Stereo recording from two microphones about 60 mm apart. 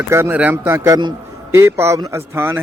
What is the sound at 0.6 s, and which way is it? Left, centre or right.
A man's voice, right.